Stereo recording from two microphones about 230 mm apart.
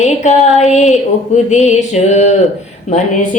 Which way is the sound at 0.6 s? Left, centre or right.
Left.